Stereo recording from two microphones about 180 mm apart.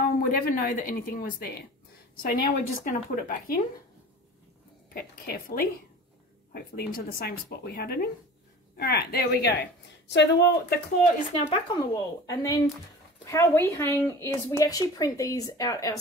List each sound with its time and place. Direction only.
0.0 s a woman's voice: 50° left (ahead or behind)
4.9 s a woman's voice: 55° left (ahead or behind); by 10.8 s 75° left (ahead or behind)
11.4 s speech: 30° left (ahead or behind)